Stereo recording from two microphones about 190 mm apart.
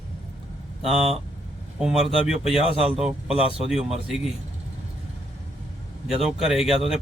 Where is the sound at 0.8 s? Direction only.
30° right (ahead or behind).